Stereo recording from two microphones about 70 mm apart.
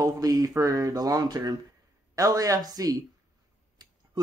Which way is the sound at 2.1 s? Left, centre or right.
Right.